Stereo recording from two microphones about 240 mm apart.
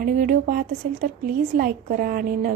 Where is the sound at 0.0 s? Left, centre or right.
Right.